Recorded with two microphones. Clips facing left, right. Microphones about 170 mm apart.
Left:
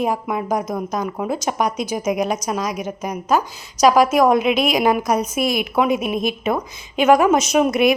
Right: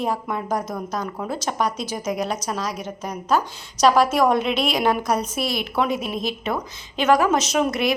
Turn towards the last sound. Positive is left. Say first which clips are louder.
# left 5 dB
turn(degrees=20)  # may be behind; listen again after turning